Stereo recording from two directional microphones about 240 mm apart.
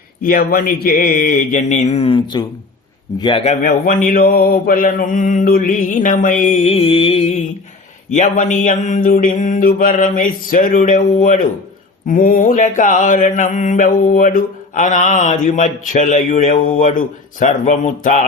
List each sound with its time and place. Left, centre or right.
0.2 s mantra: left